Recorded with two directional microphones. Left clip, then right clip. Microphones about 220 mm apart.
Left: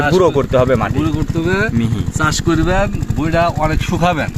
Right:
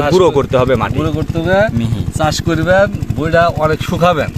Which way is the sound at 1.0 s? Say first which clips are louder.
Right 1 dB; 45° right (ahead or behind).